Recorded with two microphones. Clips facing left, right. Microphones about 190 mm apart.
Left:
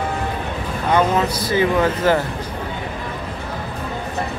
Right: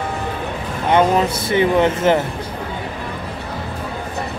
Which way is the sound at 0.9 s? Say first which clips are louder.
Right 3 dB; 25° right (ahead or behind).